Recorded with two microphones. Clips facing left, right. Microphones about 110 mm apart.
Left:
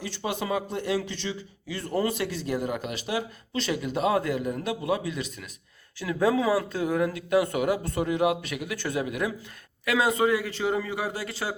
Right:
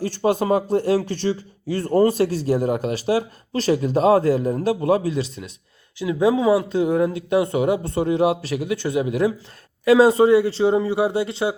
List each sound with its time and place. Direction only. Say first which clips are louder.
0.0 s a man's voice: right 11 dB; 45° right (ahead or behind); by 11.5 s 25° right (ahead or behind)